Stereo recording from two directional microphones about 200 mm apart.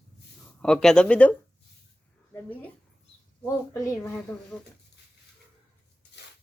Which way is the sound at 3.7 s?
15° left (ahead or behind).